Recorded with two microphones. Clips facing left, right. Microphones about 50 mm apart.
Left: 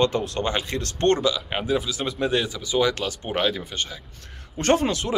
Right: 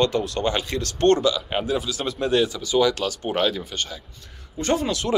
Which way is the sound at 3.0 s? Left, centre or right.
Centre.